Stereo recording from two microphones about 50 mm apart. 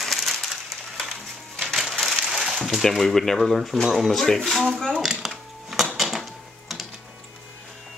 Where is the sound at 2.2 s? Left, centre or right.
Centre.